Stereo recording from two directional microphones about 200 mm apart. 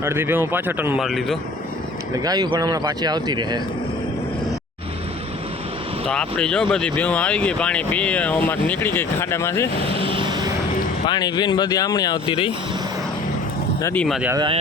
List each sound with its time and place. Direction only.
0.0 s a man's voice: 10° right (ahead or behind)
2.1 s speech: 20° right (ahead or behind)
6.1 s speech: 5° left (ahead or behind)
9.9 s vehicle: 25° right (ahead or behind)
11.0 s speech: 20° left (ahead or behind)
13.8 s speech: 5° left (ahead or behind)
14.3 s speech: 25° right (ahead or behind)